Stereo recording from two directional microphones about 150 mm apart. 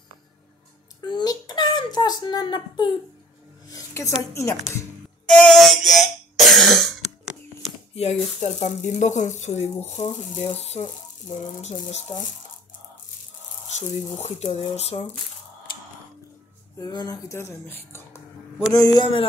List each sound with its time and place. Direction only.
1.0 s a sound: 30° left (ahead or behind)
4.3 s speech: 20° left (ahead or behind)
5.2 s cough: 5° left (ahead or behind)
7.9 s speech: 45° left (ahead or behind)
13.7 s speech: 50° left (ahead or behind)
16.7 s speech: 25° left (ahead or behind)